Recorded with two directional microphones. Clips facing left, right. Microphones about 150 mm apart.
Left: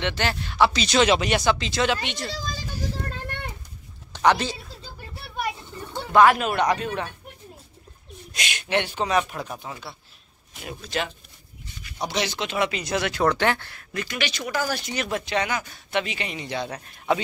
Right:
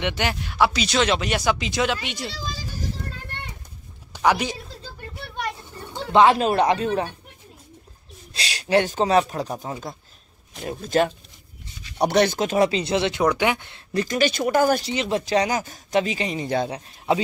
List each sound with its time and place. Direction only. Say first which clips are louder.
0.0 s speech: right 1 dB; 15° right (ahead or behind)
4.1 s a sound: even; 10° right (ahead or behind)
6.1 s speech: right 1 dB; 30° right (ahead or behind)
8.3 s speech: right 5 dB; 35° right (ahead or behind)
13.3 s speech: right 1 dB; 10° right (ahead or behind)
13.9 s speech: right 8 dB; 40° right (ahead or behind)
14.8 s speech: right 4 dB; 25° right (ahead or behind)
15.2 s speech: right 5 dB; 35° right (ahead or behind)
16.8 s a man's voice: right 2 dB; 25° right (ahead or behind)